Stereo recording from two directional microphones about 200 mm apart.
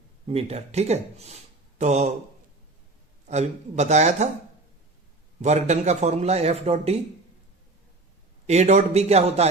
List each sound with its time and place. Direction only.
0.3 s speech: 30° right (ahead or behind)
3.2 s speech: 35° right (ahead or behind)
5.4 s speech: 35° right (ahead or behind)
8.4 s speech: 35° right (ahead or behind)